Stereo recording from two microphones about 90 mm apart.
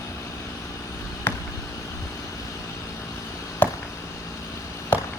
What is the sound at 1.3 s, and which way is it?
Basketball bounce, 20° left (ahead or behind).